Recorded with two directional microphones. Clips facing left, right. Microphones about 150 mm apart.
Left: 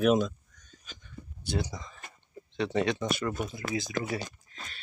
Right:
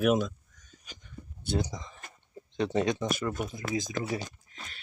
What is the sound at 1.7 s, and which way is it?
Speech, 15° right (ahead or behind).